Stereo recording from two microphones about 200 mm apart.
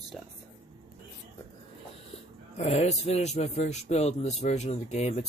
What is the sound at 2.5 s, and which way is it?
A man's voice, 35° left (ahead or behind).